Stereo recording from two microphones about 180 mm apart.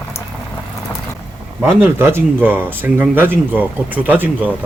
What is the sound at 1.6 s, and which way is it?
Speech, 15° right (ahead or behind).